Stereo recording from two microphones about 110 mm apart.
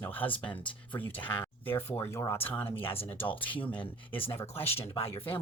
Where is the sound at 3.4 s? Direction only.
50° left (ahead or behind).